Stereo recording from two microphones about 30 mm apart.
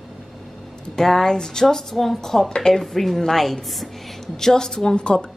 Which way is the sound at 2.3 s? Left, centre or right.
Centre.